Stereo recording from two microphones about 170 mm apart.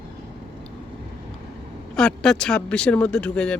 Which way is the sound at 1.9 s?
5° left (ahead or behind).